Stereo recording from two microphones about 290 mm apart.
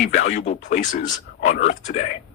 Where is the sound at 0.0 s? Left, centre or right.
Left.